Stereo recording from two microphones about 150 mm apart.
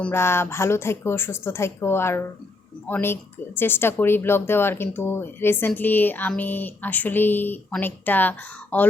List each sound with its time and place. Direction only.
0.0 s speech: 15° left (ahead or behind)